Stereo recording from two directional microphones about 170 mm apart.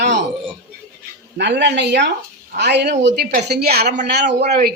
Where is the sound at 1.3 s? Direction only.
85° right.